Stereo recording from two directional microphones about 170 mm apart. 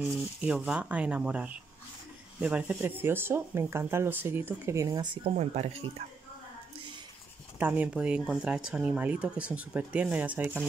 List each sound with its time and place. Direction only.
0.0 s speech: 5° right (ahead or behind); by 5.3 s 30° right (ahead or behind)
5.3 s speech: 40° right (ahead or behind)
7.5 s speech: 10° right (ahead or behind)